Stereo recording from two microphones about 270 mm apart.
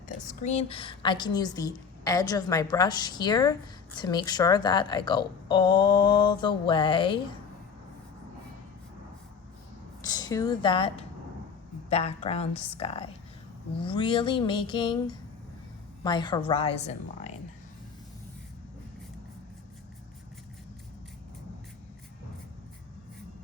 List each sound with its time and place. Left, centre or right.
0.4 s a woman's voice: left
10.0 s a woman's voice: centre